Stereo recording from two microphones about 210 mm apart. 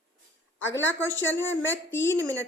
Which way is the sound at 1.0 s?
10° left (ahead or behind).